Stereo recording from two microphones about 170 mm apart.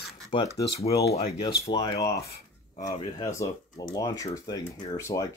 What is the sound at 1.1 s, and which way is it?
Speech, 35° left (ahead or behind).